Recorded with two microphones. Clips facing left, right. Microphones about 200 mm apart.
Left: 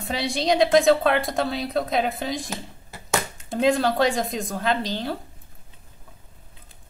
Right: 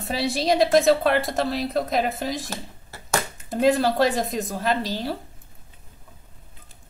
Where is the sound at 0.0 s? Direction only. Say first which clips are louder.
Right 1 dB; 5° right (ahead or behind).